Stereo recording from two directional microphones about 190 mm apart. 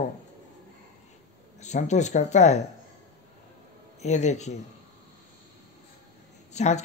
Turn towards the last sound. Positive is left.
turn(degrees=35)  # may be behind; listen again after turning